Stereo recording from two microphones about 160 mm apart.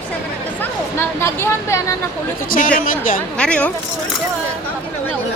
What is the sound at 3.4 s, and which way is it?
Speech, 5° left (ahead or behind).